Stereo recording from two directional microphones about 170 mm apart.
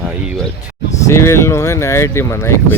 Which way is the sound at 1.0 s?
15° left (ahead or behind).